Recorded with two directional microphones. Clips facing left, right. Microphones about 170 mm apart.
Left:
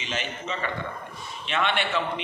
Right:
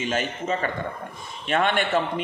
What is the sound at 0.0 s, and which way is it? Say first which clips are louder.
A man's voice: right 6 dB; 45° right (ahead or behind).